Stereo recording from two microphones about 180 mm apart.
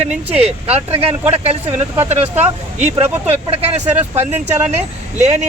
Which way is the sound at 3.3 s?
35° right (ahead or behind).